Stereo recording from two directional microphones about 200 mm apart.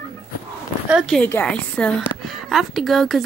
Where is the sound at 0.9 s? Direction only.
Centre (ahead or behind).